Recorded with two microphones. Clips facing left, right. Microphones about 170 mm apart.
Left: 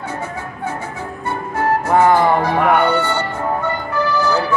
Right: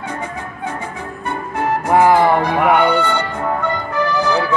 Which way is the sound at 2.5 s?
10° right (ahead or behind).